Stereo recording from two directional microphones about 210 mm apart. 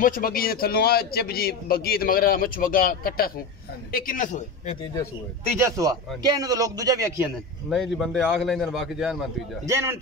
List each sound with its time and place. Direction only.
0.0 s a man's voice: 40° left (ahead or behind)
5.8 s a man's voice: 15° right (ahead or behind)
7.7 s a man's voice: centre (ahead or behind)
9.7 s a man's voice: 15° right (ahead or behind)